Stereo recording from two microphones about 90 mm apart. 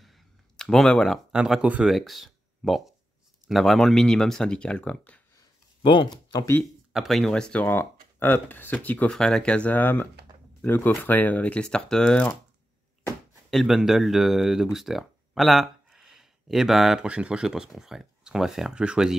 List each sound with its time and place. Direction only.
0.0 s a sound: 5° left (ahead or behind)
1.3 s speech: 10° right (ahead or behind)
1.9 s speech: centre (ahead or behind)
5.8 s speech: 70° left (ahead or behind)
6.6 s speech: centre (ahead or behind)
7.6 s speech: 25° left (ahead or behind)
13.5 s speech: centre (ahead or behind)